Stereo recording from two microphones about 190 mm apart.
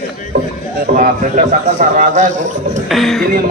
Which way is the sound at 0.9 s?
40° right (ahead or behind).